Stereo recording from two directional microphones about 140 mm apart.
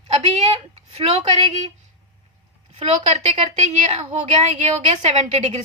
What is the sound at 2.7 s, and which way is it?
A woman's voice, 45° right (ahead or behind).